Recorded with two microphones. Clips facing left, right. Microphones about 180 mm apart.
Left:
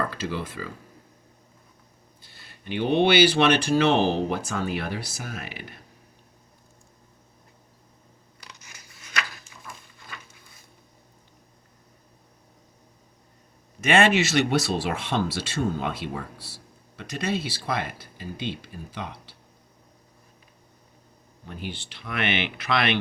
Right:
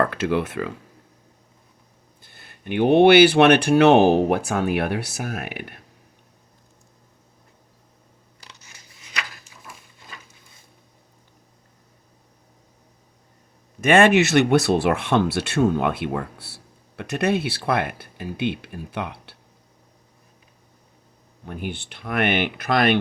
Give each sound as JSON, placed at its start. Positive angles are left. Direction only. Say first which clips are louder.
{"t": 0.0, "sound": "speech", "louder": "right 8 dB", "side_deg": -65}
{"t": 2.2, "sound": "speech", "louder": "right 4 dB", "side_deg": -55}
{"t": 13.8, "sound": "speech", "louder": "right 5 dB", "side_deg": -50}
{"t": 21.4, "sound": "speech", "louder": "right 5 dB", "side_deg": -55}